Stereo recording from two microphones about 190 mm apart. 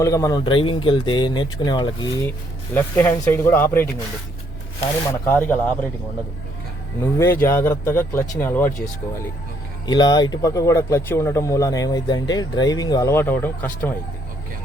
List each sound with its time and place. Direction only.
0.0 s speech: 20° left (ahead or behind)
2.7 s speech: 10° left (ahead or behind)
5.2 s speech: 10° left (ahead or behind)
7.0 s speech: 15° left (ahead or behind)
9.8 s speech: 20° left (ahead or behind)